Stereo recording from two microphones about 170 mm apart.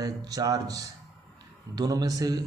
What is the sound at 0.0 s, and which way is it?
Speech, 20° right (ahead or behind).